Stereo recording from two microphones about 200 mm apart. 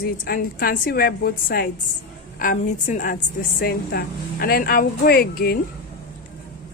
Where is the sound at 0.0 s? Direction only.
50° left (ahead or behind).